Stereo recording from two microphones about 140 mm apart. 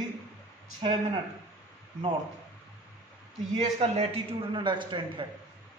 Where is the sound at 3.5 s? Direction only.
50° right (ahead or behind).